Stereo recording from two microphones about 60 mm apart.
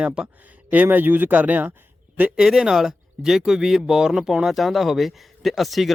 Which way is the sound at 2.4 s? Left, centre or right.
Centre.